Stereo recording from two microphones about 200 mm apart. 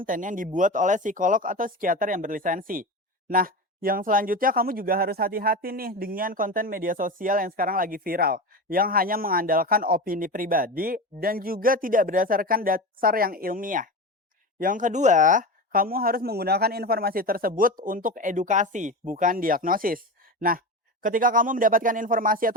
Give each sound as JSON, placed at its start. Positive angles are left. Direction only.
{"t": 0.0, "sound": "speech", "side_deg": -40}